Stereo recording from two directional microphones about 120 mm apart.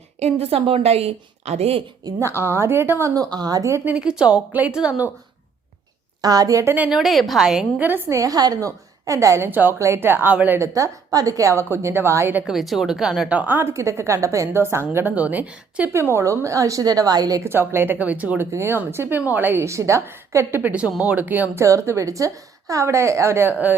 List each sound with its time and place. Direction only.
0.2 s a woman's voice: 60° right (ahead or behind)
2.0 s a woman's voice: 25° right (ahead or behind)
3.2 s a woman's voice: 35° right (ahead or behind)
3.8 s a woman's voice: 10° right (ahead or behind)
6.2 s a woman's voice: 30° right (ahead or behind)
6.7 s a woman's voice: 10° right (ahead or behind)
7.0 s a woman's voice: centre (ahead or behind)
7.8 s a woman's voice: 15° right (ahead or behind)
8.1 s a woman's voice: 30° right (ahead or behind)
12.5 s a woman's voice: centre (ahead or behind); by 17.5 s 30° right (ahead or behind)
17.5 s a woman's voice: 20° right (ahead or behind)
21.5 s a woman's voice: 25° right (ahead or behind)